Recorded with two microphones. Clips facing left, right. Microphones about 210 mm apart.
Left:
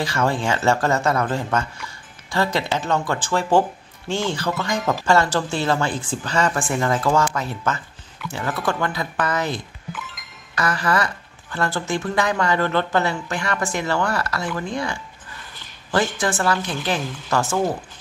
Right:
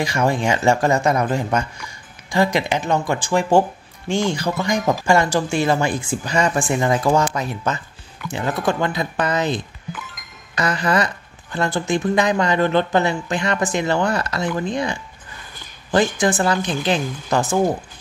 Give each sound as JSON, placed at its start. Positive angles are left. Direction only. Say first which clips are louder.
{"t": 0.0, "sound": "speech", "louder": "right 2 dB", "side_deg": -15}
{"t": 16.2, "sound": "speech", "louder": "right 3 dB", "side_deg": -15}
{"t": 17.0, "sound": "speech", "louder": "right 3 dB", "side_deg": 0}
{"t": 17.3, "sound": "speech", "louder": "right 2 dB", "side_deg": -15}